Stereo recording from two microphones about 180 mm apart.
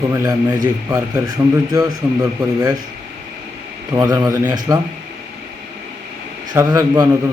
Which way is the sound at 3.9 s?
20° right (ahead or behind).